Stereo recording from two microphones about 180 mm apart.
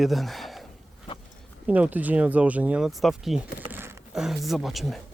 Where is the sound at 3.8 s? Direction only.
15° right (ahead or behind).